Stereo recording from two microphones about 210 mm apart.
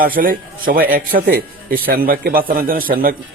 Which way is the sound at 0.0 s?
45° right (ahead or behind).